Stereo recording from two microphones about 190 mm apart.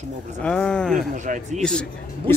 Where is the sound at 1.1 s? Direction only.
40° right (ahead or behind).